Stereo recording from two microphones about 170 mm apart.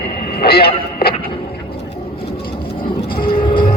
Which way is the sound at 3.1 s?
60° left (ahead or behind).